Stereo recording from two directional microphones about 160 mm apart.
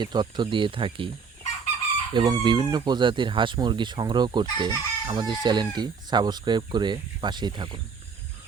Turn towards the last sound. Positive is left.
turn(degrees=-30)  # may be behind; listen again after turning